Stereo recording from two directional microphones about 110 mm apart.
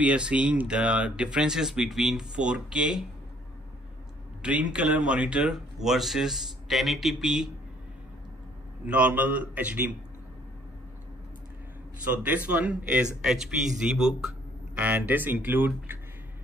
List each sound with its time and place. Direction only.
0.0 s speech: 10° right (ahead or behind)
4.4 s speech: 10° right (ahead or behind)
8.8 s speech: 10° right (ahead or behind)
12.2 s speech: 15° right (ahead or behind)
14.8 s speech: 15° right (ahead or behind)